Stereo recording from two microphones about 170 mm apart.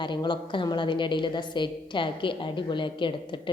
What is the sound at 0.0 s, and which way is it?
A woman's voice, 25° left (ahead or behind).